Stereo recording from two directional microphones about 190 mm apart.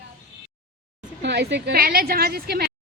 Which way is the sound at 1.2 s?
65° right (ahead or behind).